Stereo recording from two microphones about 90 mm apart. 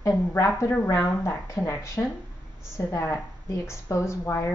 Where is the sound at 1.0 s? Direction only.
25° left (ahead or behind).